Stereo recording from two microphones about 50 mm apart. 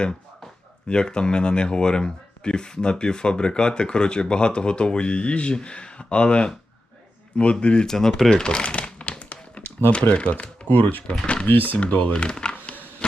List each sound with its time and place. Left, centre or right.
0.9 s speech: centre
7.9 s speech: centre
8.3 s crumpling: centre
9.9 s speech: left
11.4 s speech: left; by 12.5 s centre
12.6 s a sound: left